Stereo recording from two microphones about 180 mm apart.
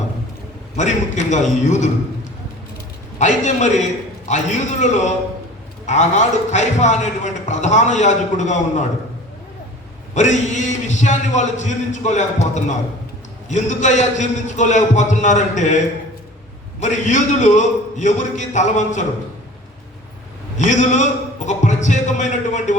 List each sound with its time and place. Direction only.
0.8 s a man's voice: 40° left (ahead or behind)
3.2 s a man's voice: 40° left (ahead or behind)
10.2 s a man's voice: 40° left (ahead or behind)
16.8 s a man's voice: 45° left (ahead or behind)
20.6 s a man's voice: 40° left (ahead or behind)